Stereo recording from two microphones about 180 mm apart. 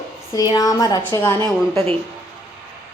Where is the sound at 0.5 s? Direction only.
20° left (ahead or behind).